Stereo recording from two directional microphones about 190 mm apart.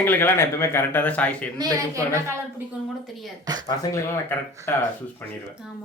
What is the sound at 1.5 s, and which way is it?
Speech, 20° right (ahead or behind).